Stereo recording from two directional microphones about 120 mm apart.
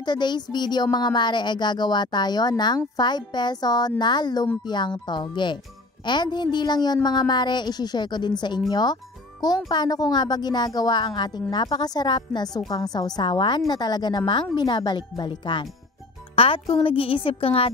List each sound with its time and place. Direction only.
0.0 s a woman's voice: 40° left (ahead or behind)